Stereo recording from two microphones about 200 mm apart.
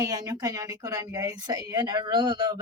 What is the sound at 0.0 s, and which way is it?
A woman's voice, 20° right (ahead or behind).